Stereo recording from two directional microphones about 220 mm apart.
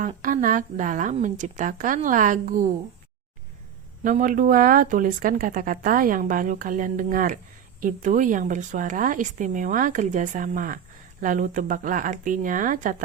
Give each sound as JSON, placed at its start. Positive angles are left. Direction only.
{"t": 0.2, "sound": "speech", "side_deg": -35}
{"t": 4.0, "sound": "speech", "side_deg": -35}